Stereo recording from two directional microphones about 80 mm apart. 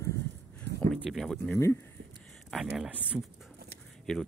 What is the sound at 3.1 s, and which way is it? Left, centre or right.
Speech, centre.